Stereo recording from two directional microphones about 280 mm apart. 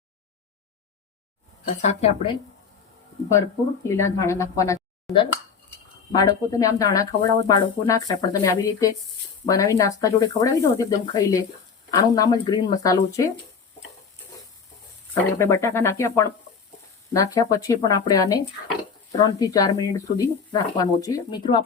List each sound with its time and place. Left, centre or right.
1.6 s a woman's voice: left
3.8 s speech: centre
15.1 s speech: centre